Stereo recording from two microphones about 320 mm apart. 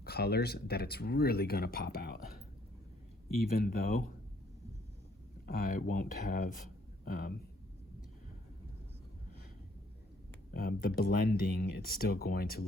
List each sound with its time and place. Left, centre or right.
0.0 s speech: left
5.5 s speech: left
10.5 s speech: left